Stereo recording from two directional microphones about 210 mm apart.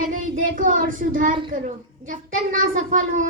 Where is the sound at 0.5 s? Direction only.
40° right (ahead or behind).